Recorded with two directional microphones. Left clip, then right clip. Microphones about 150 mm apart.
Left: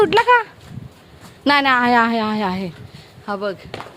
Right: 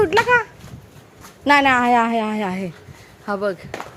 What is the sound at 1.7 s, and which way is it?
Speech, 20° left (ahead or behind).